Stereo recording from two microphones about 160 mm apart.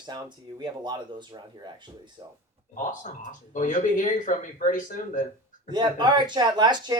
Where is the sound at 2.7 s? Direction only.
55° left (ahead or behind).